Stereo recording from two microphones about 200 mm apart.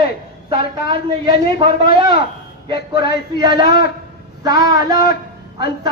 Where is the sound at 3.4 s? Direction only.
20° right (ahead or behind).